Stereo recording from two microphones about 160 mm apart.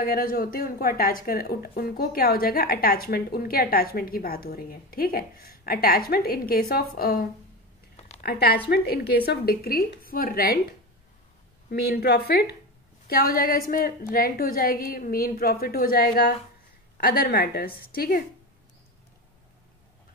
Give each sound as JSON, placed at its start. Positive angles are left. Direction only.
{"t": 0.0, "sound": "a woman's voice", "side_deg": 65}
{"t": 11.7, "sound": "a woman's voice", "side_deg": 85}
{"t": 13.1, "sound": "a woman's voice", "side_deg": 65}